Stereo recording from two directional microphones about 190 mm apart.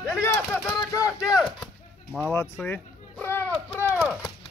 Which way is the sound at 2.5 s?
5° left (ahead or behind).